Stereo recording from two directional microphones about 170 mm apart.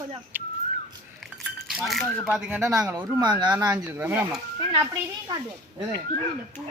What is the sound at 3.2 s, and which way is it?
Speech, 25° right (ahead or behind).